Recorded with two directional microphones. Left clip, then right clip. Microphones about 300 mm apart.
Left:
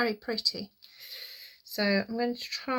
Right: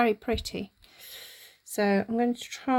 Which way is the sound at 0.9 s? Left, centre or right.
Right.